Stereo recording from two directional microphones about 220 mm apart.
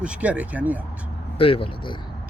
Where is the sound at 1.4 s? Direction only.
25° left (ahead or behind).